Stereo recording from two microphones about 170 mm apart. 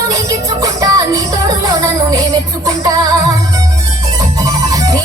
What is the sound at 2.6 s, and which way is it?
Music, 20° right (ahead or behind).